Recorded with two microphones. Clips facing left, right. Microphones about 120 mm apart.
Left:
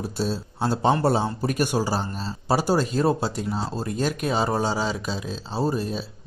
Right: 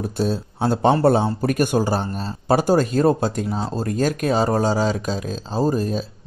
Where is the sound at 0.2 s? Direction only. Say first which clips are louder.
Right 4 dB; 50° right (ahead or behind).